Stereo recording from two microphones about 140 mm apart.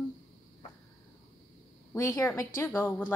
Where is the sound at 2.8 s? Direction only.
15° left (ahead or behind).